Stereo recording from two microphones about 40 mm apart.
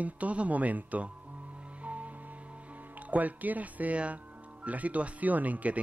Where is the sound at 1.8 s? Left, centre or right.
Right.